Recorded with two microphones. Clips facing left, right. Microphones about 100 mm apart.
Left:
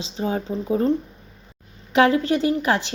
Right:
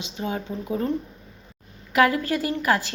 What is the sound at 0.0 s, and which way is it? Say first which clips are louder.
Speech: left 4 dB; 35° left (ahead or behind).